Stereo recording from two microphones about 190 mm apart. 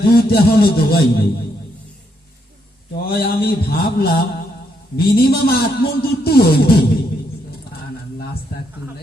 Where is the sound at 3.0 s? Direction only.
50° left (ahead or behind).